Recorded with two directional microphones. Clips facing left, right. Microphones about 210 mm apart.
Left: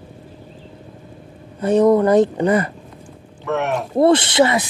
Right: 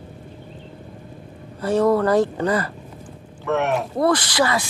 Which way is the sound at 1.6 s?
20° left (ahead or behind).